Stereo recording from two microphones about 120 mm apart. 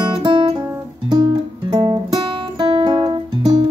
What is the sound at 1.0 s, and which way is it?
Music, 35° right (ahead or behind).